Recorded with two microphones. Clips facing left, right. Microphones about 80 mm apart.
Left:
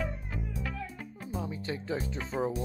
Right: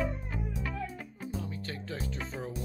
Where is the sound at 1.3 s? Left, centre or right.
Centre.